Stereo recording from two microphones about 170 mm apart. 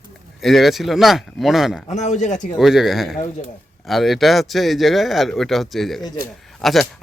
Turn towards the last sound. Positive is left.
turn(degrees=0)  # may be behind; listen again after turning